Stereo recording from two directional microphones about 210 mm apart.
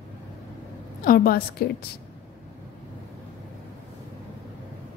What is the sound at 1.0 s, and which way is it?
Speech, 45° left (ahead or behind).